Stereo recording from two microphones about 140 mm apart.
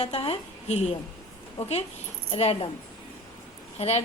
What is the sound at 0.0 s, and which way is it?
A woman's voice, 45° left (ahead or behind).